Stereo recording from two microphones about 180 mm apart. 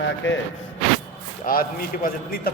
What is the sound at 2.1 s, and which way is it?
Speech, 55° left (ahead or behind).